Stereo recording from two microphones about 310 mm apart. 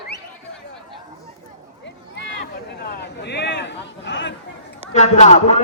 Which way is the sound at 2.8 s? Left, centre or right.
Left.